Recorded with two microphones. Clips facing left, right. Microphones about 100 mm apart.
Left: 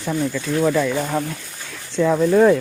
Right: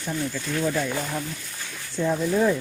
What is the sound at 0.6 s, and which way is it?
Speech, 90° left.